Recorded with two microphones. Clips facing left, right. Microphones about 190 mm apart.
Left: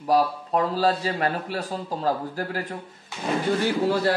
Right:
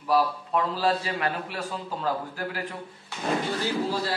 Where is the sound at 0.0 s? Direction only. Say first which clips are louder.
Left 2 dB; 40° left (ahead or behind).